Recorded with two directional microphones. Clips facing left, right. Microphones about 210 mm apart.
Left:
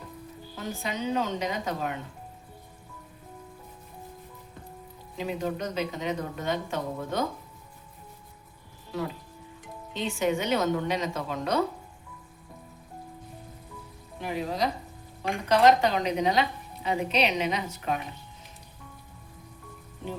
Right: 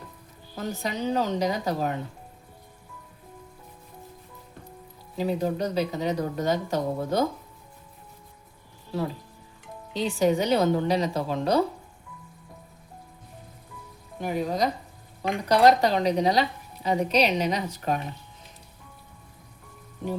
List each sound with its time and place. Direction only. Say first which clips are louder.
0.5 s a woman's voice: right 3 dB; 40° right (ahead or behind)
5.1 s a woman's voice: right 5 dB; 35° right (ahead or behind)
9.9 s a woman's voice: right 4 dB; 35° right (ahead or behind)
14.2 s a woman's voice: right 3 dB; 45° right (ahead or behind)